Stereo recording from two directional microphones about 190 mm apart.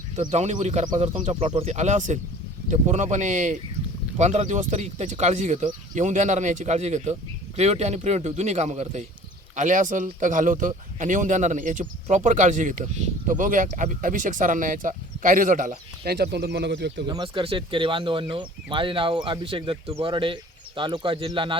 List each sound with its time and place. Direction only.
0.3 s speech: 40° right (ahead or behind)
16.1 s speech: 60° right (ahead or behind)
17.1 s speech: 25° right (ahead or behind)